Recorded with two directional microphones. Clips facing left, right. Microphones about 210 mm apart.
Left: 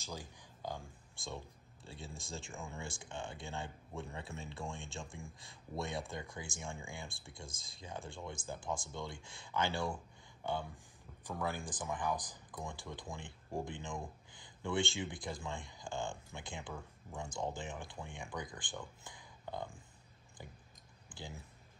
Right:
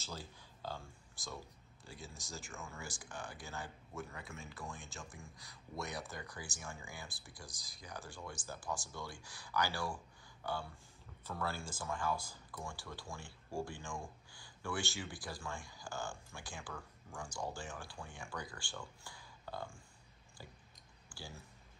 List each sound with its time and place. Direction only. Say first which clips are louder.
0.0 s speech: left 2 dB; 15° left (ahead or behind)
1.9 s speech: left 3 dB; 30° left (ahead or behind)
2.5 s speech: left 3 dB; 15° left (ahead or behind)
2.8 s speech: left 3 dB; 25° left (ahead or behind)
7.1 s speech: left 3 dB; 5° right (ahead or behind)
7.5 s speech: left 3 dB; 25° left (ahead or behind)
21.1 s a sound: left 3 dB; 20° left (ahead or behind)